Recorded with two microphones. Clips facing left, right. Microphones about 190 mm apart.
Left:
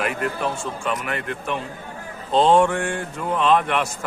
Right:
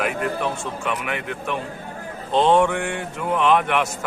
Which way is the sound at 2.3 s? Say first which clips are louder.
Left 1 dB; 25° left (ahead or behind).